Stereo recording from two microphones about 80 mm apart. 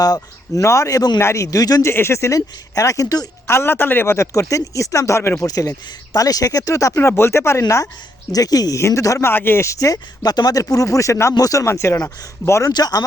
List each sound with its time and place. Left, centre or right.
0.0 s speech: left
1.8 s speech: left
3.4 s speech: left
5.5 s speech: left
8.3 s speech: left
9.1 s speech: left
9.7 s speech: left
12.7 s speech: left